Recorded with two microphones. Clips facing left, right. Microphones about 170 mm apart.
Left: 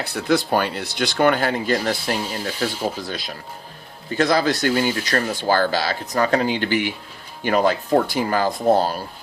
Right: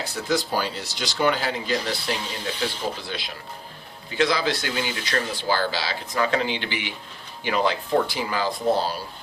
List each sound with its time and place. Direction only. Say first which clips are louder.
0.0 s speech: left 5 dB; 60° left (ahead or behind)